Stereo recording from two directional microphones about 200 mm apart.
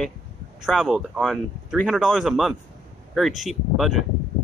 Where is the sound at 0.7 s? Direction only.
Centre (ahead or behind).